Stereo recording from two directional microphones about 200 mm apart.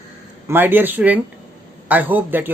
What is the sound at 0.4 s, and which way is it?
Speech, 10° right (ahead or behind).